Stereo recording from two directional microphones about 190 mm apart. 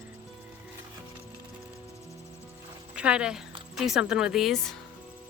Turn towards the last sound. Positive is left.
turn(degrees=0)  # may be behind; listen again after turning